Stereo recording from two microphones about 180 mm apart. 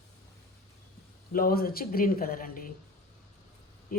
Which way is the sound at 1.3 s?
55° left (ahead or behind).